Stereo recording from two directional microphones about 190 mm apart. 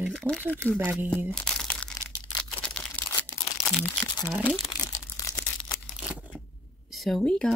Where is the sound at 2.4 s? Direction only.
5° left (ahead or behind).